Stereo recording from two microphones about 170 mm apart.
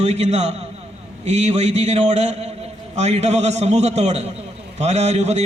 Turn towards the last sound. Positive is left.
turn(degrees=-40)  # may be behind; listen again after turning